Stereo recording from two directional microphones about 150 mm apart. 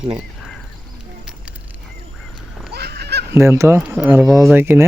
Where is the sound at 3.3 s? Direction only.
20° right (ahead or behind).